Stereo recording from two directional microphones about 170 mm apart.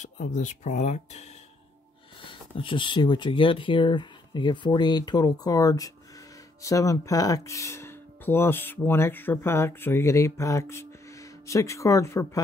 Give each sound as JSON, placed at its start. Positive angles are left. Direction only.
{"t": 0.0, "sound": "speech", "side_deg": 45}
{"t": 2.5, "sound": "speech", "side_deg": 30}